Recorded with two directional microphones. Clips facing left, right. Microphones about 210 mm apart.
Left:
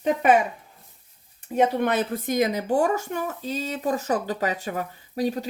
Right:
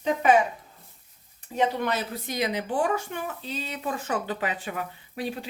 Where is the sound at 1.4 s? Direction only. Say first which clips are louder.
Left 4 dB; 55° left (ahead or behind).